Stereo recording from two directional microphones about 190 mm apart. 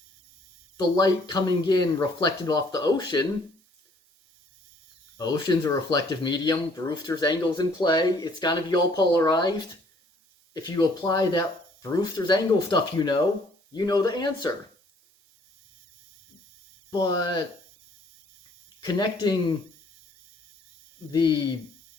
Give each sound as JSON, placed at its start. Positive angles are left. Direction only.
{"t": 0.8, "sound": "speech", "side_deg": 20}
{"t": 5.1, "sound": "speech", "side_deg": 20}
{"t": 16.9, "sound": "speech", "side_deg": 20}
{"t": 18.8, "sound": "speech", "side_deg": 20}
{"t": 21.1, "sound": "speech", "side_deg": 20}